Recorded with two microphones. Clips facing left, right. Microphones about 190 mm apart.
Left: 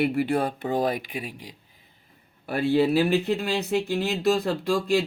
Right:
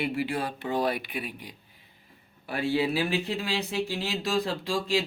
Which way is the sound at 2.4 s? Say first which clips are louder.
Left 5 dB; 45° left (ahead or behind).